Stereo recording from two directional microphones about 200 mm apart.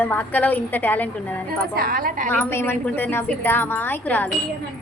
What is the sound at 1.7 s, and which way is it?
Speech, 50° right (ahead or behind).